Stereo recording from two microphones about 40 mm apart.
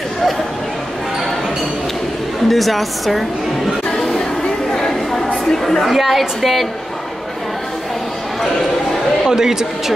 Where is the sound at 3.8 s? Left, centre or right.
Centre.